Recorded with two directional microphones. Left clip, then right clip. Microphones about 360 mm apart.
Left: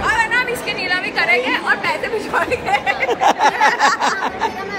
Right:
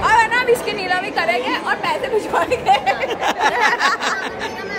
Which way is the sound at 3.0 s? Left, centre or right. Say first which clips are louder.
Left 4 dB; centre.